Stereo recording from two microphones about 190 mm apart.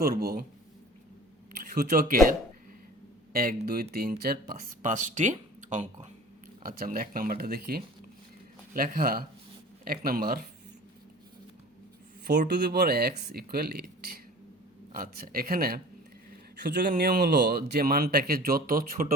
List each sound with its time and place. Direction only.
0.0 s speech: 50° right (ahead or behind)
1.7 s speech: 50° right (ahead or behind)
3.3 s speech: 50° right (ahead or behind)
6.6 s speech: 50° right (ahead or behind)
12.3 s speech: 60° right (ahead or behind)